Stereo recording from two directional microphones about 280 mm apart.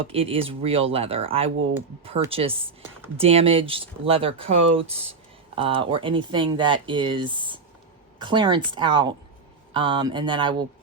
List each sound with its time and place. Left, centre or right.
0.0 s speech: centre